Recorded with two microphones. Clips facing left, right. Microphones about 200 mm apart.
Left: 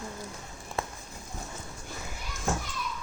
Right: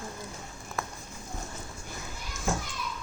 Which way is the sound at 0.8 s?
30° left (ahead or behind).